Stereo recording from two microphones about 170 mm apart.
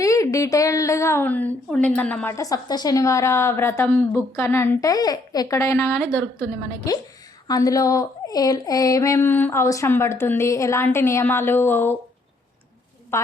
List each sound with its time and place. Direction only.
0.0 s speech: 20° left (ahead or behind)
13.1 s a woman's voice: 15° left (ahead or behind)